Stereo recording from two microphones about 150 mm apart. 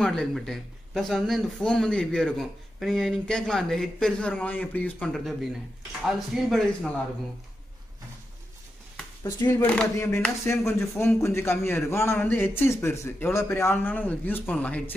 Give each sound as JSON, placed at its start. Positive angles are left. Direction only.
{"t": 0.0, "sound": "a man's voice", "side_deg": 5}
{"t": 9.2, "sound": "a man's voice", "side_deg": 15}